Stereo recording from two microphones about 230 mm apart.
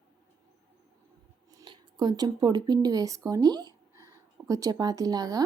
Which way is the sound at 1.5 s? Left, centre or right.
Centre.